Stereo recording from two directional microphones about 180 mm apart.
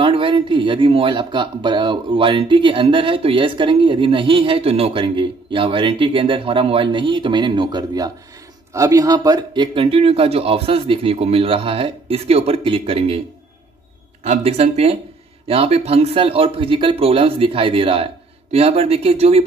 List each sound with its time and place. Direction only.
0.0 s speech: 30° right (ahead or behind)
14.2 s speech: 40° right (ahead or behind)